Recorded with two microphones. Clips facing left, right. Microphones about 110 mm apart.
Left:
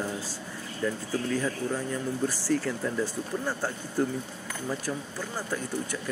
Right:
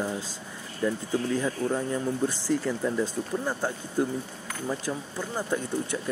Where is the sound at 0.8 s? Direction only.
15° right (ahead or behind).